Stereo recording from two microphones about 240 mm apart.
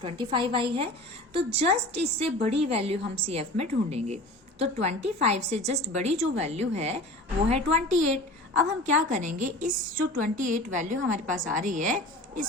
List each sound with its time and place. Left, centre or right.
0.0 s a woman's voice: right